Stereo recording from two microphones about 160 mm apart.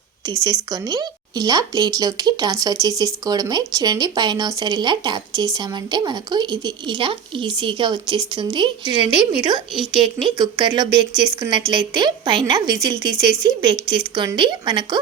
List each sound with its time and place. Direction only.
0.4 s speech: 25° right (ahead or behind)